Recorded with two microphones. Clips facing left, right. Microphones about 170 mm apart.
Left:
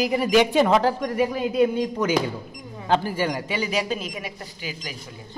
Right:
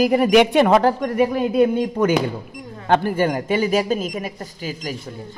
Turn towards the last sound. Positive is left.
turn(degrees=-45)  # may be behind; listen again after turning